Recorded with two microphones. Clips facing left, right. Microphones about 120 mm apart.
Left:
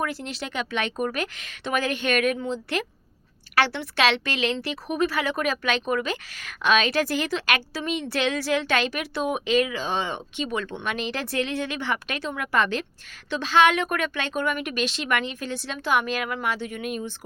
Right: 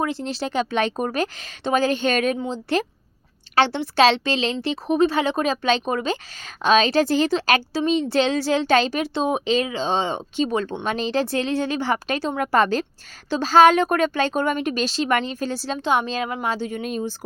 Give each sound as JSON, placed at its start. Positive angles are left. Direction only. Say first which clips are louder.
{"t": 0.0, "sound": "a woman's voice", "louder": "right 5 dB", "side_deg": -25}